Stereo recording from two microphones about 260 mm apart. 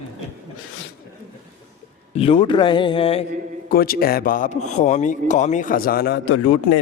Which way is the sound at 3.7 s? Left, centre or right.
Left.